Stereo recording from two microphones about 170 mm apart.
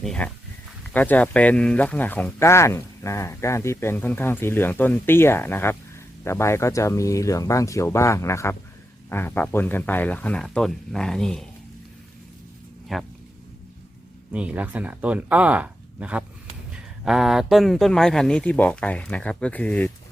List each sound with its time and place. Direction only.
0.0 s speech: 5° left (ahead or behind)
12.9 s speech: centre (ahead or behind)
14.3 s speech: 10° right (ahead or behind); by 19.9 s 10° left (ahead or behind)